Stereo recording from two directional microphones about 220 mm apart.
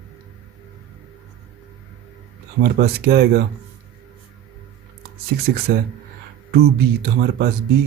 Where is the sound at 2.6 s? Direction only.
45° right (ahead or behind).